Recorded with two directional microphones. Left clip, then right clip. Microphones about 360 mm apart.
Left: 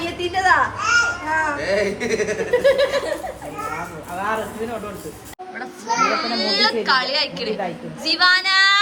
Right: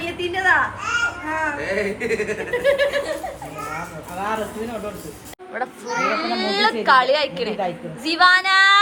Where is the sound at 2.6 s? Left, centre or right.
Left.